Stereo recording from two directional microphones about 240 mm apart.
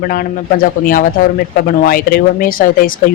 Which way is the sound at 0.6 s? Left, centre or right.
Left.